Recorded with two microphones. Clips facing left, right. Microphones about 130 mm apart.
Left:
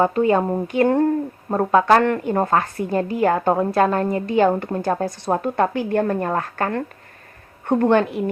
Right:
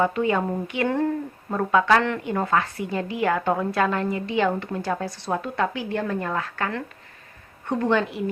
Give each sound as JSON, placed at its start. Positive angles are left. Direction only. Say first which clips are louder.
{"t": 0.0, "sound": "a woman's voice", "louder": "left 5 dB", "side_deg": 40}